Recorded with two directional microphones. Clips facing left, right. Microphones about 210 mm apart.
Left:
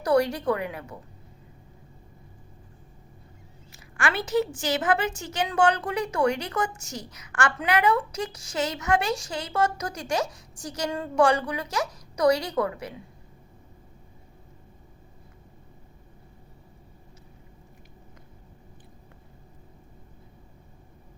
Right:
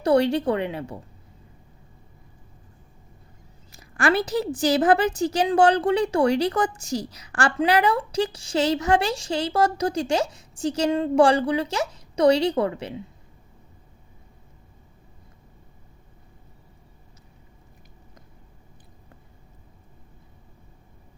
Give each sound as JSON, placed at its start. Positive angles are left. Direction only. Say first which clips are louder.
{"t": 0.0, "sound": "a woman's voice", "louder": "right 3 dB", "side_deg": -25}
{"t": 3.7, "sound": "a woman's voice", "louder": "right 7 dB", "side_deg": -35}